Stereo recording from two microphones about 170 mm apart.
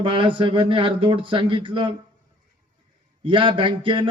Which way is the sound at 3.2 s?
30° right (ahead or behind).